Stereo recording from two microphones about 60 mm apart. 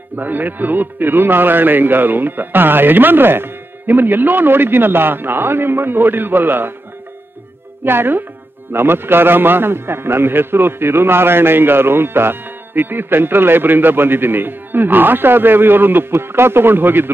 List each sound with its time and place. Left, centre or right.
0.1 s a man's voice: right
7.8 s a man's voice: right